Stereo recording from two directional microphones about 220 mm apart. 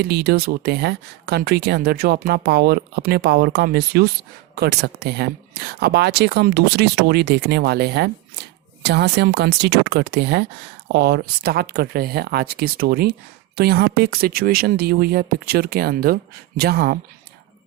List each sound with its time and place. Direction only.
0.0 s speech: 45° right (ahead or behind)